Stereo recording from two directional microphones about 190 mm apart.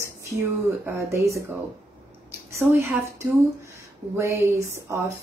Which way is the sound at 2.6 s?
15° right (ahead or behind).